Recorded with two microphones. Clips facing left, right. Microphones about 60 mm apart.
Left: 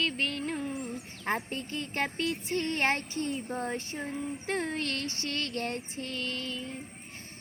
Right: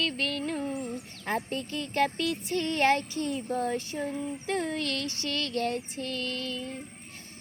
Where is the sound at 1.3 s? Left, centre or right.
Left.